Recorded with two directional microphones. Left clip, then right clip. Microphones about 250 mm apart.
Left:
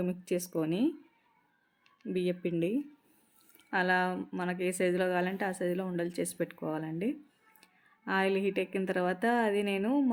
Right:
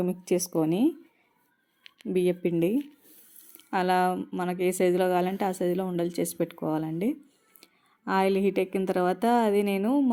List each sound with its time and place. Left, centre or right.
0.0 s a woman's voice: centre
2.0 s a woman's voice: centre